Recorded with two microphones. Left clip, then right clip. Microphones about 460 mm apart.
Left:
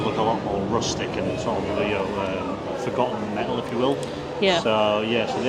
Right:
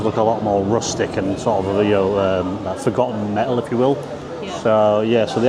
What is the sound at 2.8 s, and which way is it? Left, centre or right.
Speech, right.